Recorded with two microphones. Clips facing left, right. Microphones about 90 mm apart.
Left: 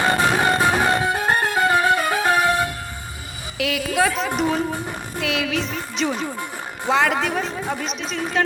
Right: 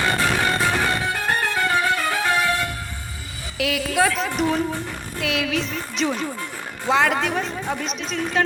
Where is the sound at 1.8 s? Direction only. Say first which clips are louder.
Left 3 dB; 15° left (ahead or behind).